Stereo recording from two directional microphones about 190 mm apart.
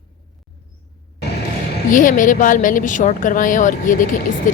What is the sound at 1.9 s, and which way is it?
A woman's voice, 45° left (ahead or behind).